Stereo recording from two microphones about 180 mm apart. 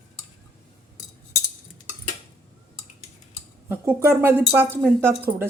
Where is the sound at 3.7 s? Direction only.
15° right (ahead or behind).